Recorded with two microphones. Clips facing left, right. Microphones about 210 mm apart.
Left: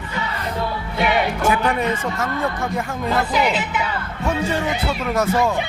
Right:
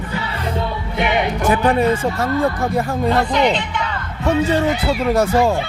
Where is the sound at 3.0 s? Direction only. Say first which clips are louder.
Right 3 dB; 5° left (ahead or behind).